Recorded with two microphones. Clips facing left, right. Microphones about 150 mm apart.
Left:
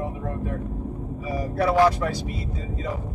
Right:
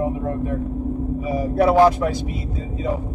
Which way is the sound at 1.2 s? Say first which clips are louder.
Right 5 dB; 25° right (ahead or behind).